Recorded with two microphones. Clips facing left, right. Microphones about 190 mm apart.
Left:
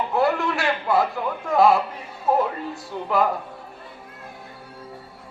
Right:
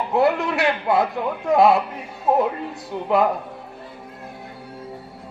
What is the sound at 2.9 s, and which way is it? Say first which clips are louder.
Speech: right 4 dB; 25° right (ahead or behind).